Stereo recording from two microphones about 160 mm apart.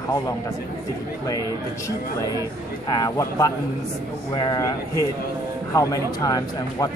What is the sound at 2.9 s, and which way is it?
Speech, 25° left (ahead or behind).